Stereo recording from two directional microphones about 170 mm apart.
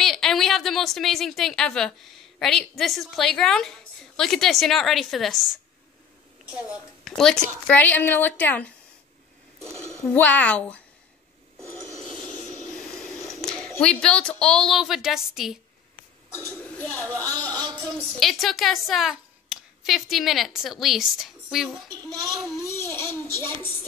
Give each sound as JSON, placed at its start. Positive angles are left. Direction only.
{"t": 0.0, "sound": "a woman's voice", "side_deg": 0}
{"t": 7.1, "sound": "a woman's voice", "side_deg": 5}
{"t": 10.1, "sound": "a woman's voice", "side_deg": 10}
{"t": 12.0, "sound": "a sound", "side_deg": -30}
{"t": 12.3, "sound": "a sound", "side_deg": 10}
{"t": 13.7, "sound": "a woman's voice", "side_deg": 5}
{"t": 16.7, "sound": "a woman's voice", "side_deg": 10}
{"t": 21.8, "sound": "a woman's voice", "side_deg": -20}
{"t": 22.3, "sound": "a woman's voice", "side_deg": 0}
{"t": 22.6, "sound": "a woman's voice", "side_deg": 15}